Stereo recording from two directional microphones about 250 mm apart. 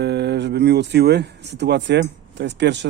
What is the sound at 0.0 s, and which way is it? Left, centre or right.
Speech, right.